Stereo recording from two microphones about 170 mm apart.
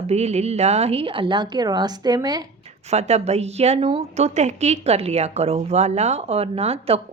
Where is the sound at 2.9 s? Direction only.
40° right (ahead or behind).